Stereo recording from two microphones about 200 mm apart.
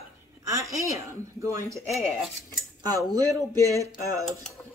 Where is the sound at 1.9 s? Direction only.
Centre (ahead or behind).